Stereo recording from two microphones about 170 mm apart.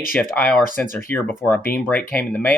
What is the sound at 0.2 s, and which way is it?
Speech, 10° left (ahead or behind).